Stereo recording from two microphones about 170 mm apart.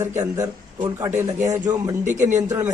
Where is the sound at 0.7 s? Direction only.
20° right (ahead or behind).